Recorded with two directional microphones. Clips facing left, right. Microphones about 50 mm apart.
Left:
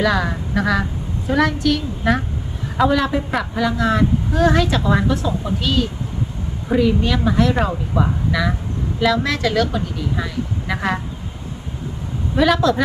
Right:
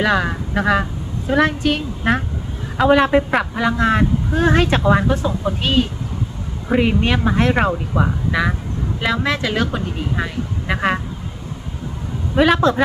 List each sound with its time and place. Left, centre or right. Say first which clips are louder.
0.0 s a woman's voice: right 1 dB; right
3.1 s a woman's voice: right 5 dB; right
3.5 s a woman's voice: left 1 dB; right
12.4 s a woman's voice: right 1 dB; right